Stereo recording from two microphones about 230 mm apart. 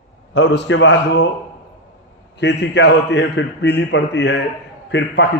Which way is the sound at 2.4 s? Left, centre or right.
Left.